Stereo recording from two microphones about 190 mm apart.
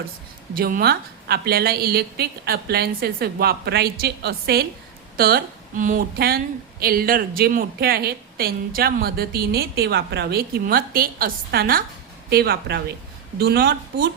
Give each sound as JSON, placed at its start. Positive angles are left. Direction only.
{"t": 0.5, "sound": "a woman's voice", "side_deg": -50}